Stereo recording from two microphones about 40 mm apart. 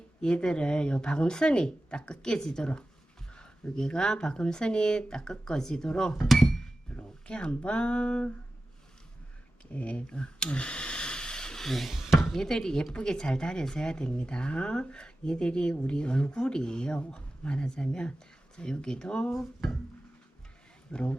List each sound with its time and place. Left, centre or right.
0.2 s speech: left
6.1 s speech: centre
6.9 s speech: left
9.7 s speech: left
19.3 s speech: centre
20.9 s speech: left